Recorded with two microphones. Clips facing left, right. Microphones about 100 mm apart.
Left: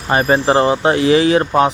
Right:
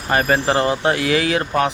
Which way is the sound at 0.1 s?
25° left (ahead or behind).